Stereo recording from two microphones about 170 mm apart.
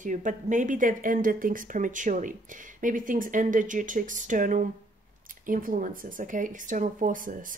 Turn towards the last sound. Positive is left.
turn(degrees=-50)  # may be behind; listen again after turning